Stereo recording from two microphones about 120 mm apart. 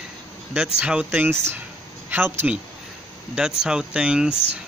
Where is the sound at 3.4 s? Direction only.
5° right (ahead or behind).